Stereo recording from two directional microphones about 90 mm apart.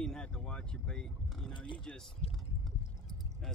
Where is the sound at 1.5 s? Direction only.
65° left (ahead or behind).